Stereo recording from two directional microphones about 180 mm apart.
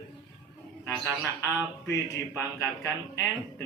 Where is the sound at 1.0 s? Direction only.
15° left (ahead or behind).